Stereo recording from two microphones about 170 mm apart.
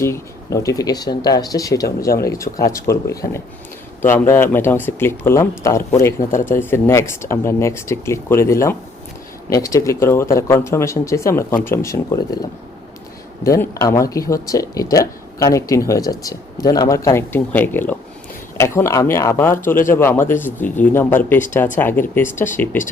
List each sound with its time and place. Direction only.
0.0 s speech: 15° left (ahead or behind)
13.4 s speech: 20° left (ahead or behind)